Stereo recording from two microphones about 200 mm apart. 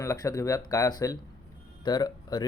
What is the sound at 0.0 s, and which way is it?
Speech, 15° left (ahead or behind).